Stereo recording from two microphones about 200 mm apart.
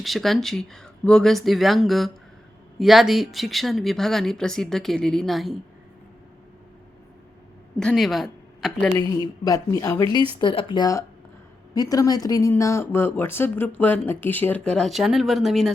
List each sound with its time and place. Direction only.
0.0 s speech: centre (ahead or behind)
7.8 s speech: centre (ahead or behind)
9.0 s speech: 15° left (ahead or behind); by 15.7 s centre (ahead or behind)